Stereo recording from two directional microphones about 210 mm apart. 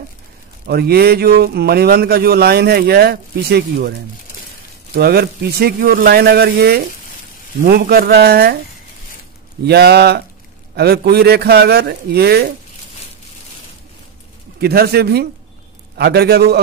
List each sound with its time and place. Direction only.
0.7 s speech: 50° right (ahead or behind)
4.9 s speech: 50° right (ahead or behind)
9.7 s speech: 50° right (ahead or behind)
14.6 s speech: 50° right (ahead or behind)